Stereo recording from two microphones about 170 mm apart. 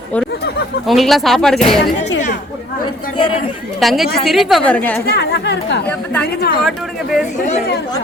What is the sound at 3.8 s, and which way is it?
A woman's voice, centre (ahead or behind).